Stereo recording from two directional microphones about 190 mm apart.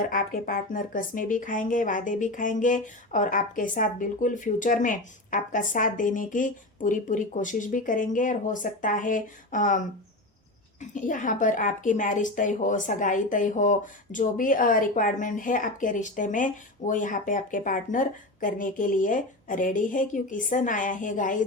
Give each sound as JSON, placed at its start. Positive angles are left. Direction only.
{"t": 0.0, "sound": "a woman's voice", "side_deg": 45}